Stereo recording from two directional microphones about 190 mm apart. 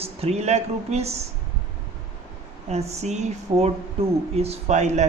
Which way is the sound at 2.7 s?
35° right (ahead or behind).